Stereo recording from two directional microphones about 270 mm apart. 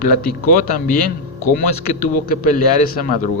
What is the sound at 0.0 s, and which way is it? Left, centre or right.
Speech, left.